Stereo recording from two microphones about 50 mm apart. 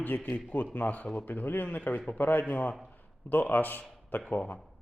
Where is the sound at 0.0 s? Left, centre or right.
Left.